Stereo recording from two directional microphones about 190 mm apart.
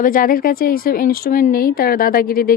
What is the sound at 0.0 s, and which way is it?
Speech, 45° left (ahead or behind).